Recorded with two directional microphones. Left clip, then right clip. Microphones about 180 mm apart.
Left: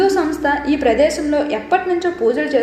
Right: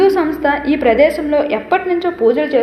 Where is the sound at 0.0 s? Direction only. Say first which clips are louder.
Right 3 dB; 15° right (ahead or behind).